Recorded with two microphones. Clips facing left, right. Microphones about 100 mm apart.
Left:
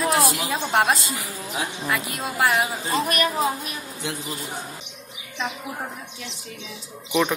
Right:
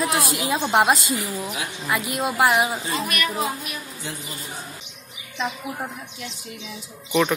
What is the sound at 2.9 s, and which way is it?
Speech, 35° left (ahead or behind).